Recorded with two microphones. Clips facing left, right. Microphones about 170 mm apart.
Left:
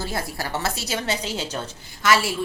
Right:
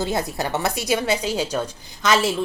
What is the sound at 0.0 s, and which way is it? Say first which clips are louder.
A woman's voice: right 5 dB; 20° right (ahead or behind).